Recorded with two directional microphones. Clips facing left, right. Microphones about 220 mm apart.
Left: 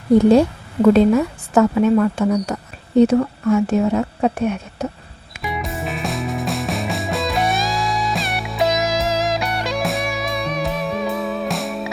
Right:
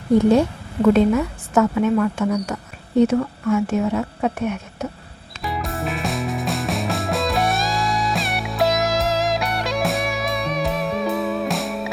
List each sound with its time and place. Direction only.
0.9 s a woman's voice: 35° left (ahead or behind)
5.5 s music: centre (ahead or behind)